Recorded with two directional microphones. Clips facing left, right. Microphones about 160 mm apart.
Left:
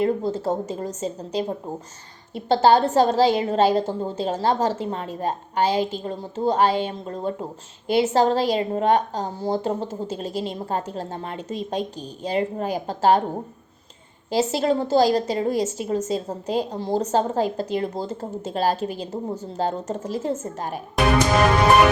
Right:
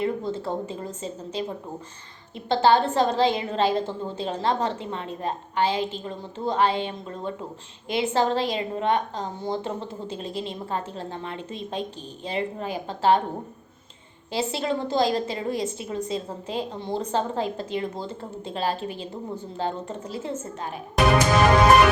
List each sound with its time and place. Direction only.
0.0 s a woman's voice: 40° left (ahead or behind)
14.3 s a woman's voice: 40° left (ahead or behind)